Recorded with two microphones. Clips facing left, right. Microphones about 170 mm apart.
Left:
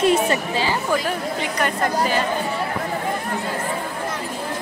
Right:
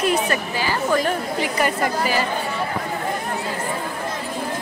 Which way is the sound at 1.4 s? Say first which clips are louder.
Right 2 dB; 5° right (ahead or behind).